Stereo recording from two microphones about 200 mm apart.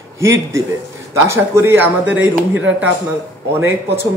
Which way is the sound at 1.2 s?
15° right (ahead or behind).